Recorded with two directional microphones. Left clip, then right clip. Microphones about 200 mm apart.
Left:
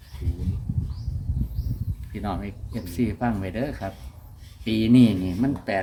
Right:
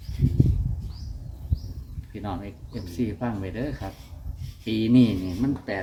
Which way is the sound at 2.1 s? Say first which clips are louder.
Left 3 dB; 60° left (ahead or behind).